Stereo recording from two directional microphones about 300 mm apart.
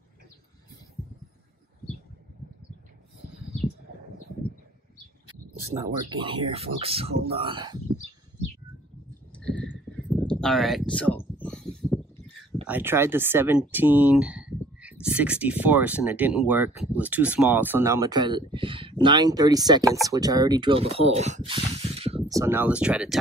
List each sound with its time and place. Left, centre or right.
6.0 s speech: centre
9.3 s a sound: centre
12.6 s speech: centre